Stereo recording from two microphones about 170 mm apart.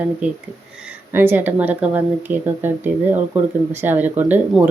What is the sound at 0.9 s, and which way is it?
Speech, 10° right (ahead or behind).